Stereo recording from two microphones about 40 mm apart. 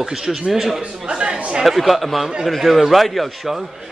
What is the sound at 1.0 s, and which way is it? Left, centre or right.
Speech, right.